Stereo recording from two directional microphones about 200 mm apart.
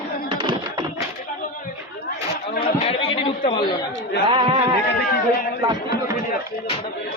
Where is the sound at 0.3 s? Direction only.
25° right (ahead or behind).